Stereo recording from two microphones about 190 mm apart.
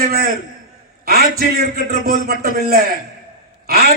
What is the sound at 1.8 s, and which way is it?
Speech, 55° right (ahead or behind).